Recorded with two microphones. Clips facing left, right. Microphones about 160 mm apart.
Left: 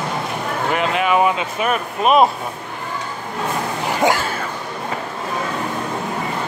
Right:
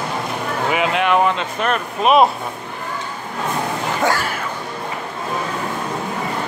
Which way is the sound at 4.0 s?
20° left (ahead or behind).